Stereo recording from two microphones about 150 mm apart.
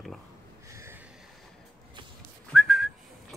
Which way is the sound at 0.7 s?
20° right (ahead or behind).